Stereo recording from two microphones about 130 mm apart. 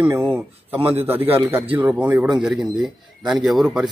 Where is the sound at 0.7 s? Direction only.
15° right (ahead or behind).